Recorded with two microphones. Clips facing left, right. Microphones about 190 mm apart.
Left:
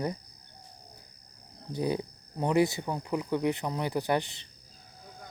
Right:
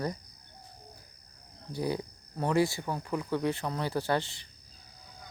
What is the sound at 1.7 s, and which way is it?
Speech, 20° left (ahead or behind).